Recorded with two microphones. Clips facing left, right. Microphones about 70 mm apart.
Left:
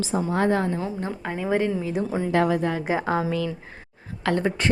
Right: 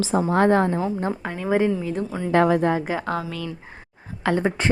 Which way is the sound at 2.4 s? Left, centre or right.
Right.